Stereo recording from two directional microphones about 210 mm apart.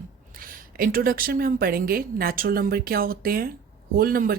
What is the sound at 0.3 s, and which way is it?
A woman's voice, 45° right (ahead or behind).